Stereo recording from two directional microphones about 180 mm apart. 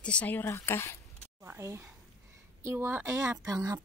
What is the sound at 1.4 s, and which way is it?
Speech, 15° right (ahead or behind).